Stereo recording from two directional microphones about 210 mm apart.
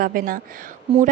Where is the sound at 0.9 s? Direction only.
25° right (ahead or behind).